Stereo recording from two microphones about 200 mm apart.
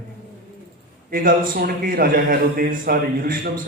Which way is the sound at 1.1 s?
45° right (ahead or behind).